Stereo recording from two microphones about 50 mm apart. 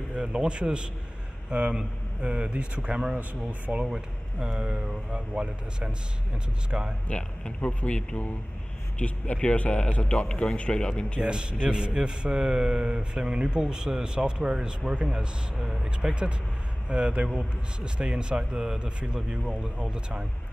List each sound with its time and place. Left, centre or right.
0.1 s a man's voice: centre
3.6 s speech: right
3.9 s speech: centre
7.1 s a man's voice: left
11.1 s a man's voice: centre